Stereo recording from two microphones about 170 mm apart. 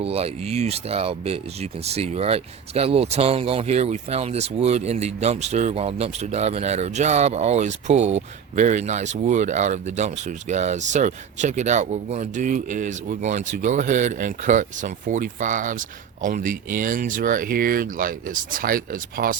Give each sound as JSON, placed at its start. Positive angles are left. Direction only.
{"t": 0.0, "sound": "speech", "side_deg": -35}